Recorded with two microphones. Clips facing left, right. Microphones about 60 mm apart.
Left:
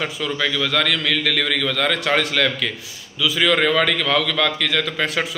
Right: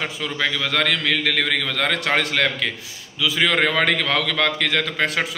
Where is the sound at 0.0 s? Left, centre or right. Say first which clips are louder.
Left 1 dB; right.